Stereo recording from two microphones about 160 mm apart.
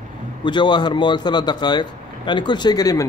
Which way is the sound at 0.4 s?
30° left (ahead or behind).